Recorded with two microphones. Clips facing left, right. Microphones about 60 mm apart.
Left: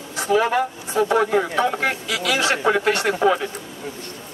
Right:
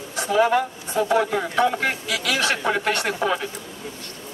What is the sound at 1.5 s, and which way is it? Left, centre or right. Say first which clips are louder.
A man's voice: even; centre.